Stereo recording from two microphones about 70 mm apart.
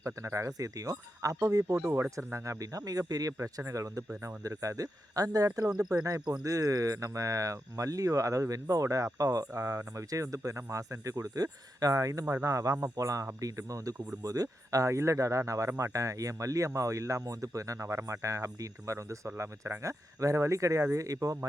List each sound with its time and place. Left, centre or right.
0.0 s speech: right
3.3 s speech: right
9.6 s speech: right